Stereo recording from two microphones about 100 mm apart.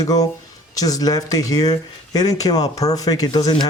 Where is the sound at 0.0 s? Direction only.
40° left (ahead or behind).